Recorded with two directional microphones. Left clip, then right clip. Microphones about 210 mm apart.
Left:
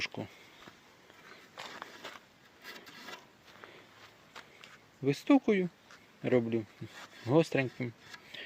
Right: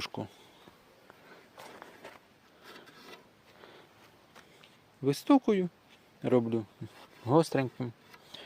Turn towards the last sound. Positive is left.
turn(degrees=-15)  # may be behind; listen again after turning